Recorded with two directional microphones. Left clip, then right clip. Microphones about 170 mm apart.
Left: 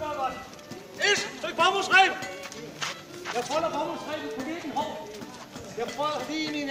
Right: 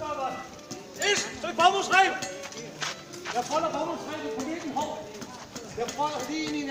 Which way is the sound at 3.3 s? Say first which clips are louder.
Right 1 dB; 5° left (ahead or behind).